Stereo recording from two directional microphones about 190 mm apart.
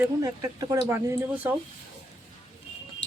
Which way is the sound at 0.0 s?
15° right (ahead or behind).